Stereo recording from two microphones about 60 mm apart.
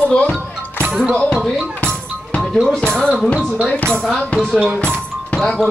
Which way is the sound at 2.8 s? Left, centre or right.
Centre.